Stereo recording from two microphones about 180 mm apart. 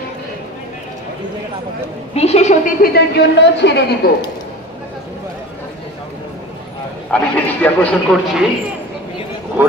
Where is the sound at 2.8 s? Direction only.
65° left (ahead or behind).